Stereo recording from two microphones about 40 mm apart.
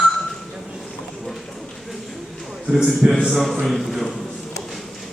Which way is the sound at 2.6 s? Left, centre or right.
Centre.